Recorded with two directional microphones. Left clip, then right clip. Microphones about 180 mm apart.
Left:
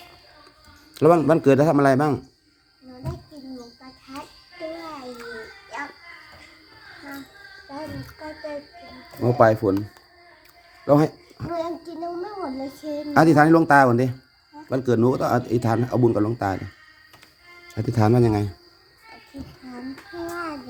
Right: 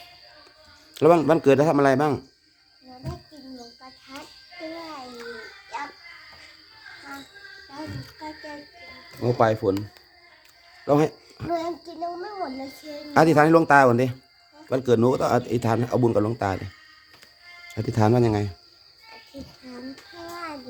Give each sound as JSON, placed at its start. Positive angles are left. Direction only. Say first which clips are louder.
{"t": 0.9, "sound": "speech", "louder": "left 1 dB", "side_deg": -15}
{"t": 9.2, "sound": "speech", "louder": "left 4 dB", "side_deg": 0}
{"t": 10.8, "sound": "speech", "louder": "left 2 dB", "side_deg": -10}
{"t": 13.1, "sound": "speech", "louder": "left 1 dB", "side_deg": -15}
{"t": 17.7, "sound": "speech", "louder": "left 1 dB", "side_deg": -15}